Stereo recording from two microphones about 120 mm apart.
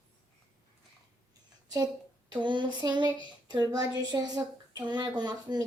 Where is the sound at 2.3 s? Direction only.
40° right (ahead or behind).